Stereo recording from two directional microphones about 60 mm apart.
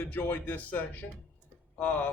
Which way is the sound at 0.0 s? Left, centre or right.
Left.